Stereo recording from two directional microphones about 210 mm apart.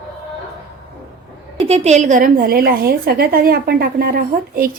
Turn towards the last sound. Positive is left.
turn(degrees=-45)  # may be behind; listen again after turning